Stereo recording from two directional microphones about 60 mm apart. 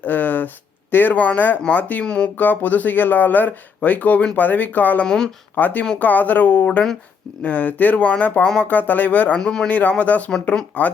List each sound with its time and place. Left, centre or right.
0.0 s a sound: left
1.7 s speech: left
2.0 s speech: centre
2.4 s speech: left
5.0 s speech: centre
5.5 s speech: left
9.4 s speech: centre
9.6 s speech: left
10.4 s speech: centre